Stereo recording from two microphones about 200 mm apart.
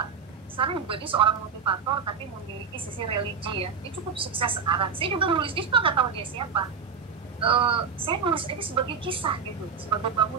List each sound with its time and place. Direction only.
0.6 s a woman's voice: 25° right (ahead or behind)